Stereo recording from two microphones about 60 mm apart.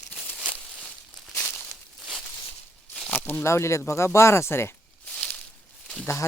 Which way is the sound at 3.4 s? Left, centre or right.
Left.